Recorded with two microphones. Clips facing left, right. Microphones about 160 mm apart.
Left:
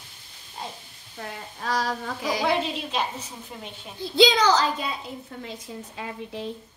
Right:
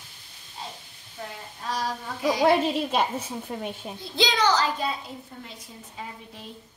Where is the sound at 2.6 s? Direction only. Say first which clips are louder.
Right 4 dB; 50° right (ahead or behind).